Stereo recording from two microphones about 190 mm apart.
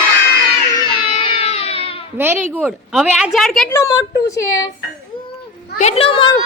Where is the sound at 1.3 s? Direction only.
30° left (ahead or behind).